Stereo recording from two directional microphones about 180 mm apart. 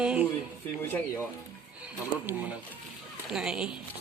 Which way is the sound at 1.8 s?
10° right (ahead or behind).